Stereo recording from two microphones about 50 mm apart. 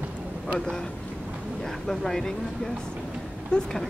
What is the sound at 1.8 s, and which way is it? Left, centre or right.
Speech, centre.